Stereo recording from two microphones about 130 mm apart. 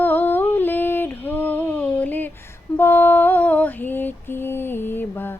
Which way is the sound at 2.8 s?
15° left (ahead or behind).